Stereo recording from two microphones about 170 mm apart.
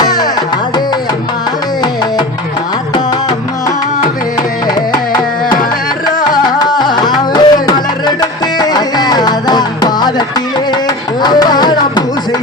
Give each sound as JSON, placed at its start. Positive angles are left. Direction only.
{"t": 0.0, "sound": "music", "side_deg": 25}
{"t": 6.3, "sound": "music", "side_deg": 25}